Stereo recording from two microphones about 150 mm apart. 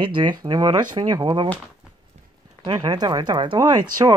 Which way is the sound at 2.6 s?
30° right (ahead or behind).